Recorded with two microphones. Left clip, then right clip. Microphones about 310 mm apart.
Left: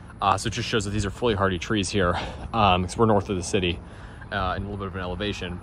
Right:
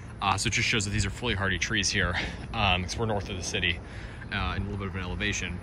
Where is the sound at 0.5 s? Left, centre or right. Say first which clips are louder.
Even; left.